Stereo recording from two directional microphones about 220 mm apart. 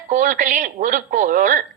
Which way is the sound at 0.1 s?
35° right (ahead or behind).